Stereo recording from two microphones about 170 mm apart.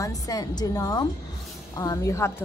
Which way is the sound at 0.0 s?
20° left (ahead or behind).